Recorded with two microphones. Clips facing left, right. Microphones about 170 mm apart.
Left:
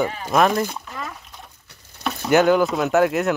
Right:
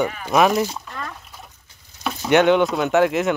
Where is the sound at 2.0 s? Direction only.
Centre (ahead or behind).